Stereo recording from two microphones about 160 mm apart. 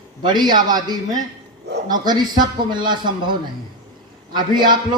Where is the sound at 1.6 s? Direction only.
90° right.